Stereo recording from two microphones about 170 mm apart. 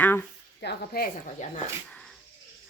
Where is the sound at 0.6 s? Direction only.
65° left (ahead or behind).